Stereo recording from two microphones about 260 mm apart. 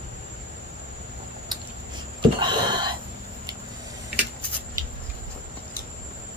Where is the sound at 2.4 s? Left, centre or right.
Centre.